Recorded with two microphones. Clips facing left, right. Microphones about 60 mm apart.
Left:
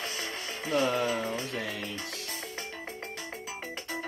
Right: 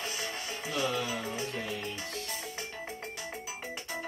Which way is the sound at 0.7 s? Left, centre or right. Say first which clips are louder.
Left 5 dB; left.